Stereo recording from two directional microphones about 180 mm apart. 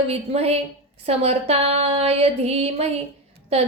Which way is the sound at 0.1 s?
35° right (ahead or behind).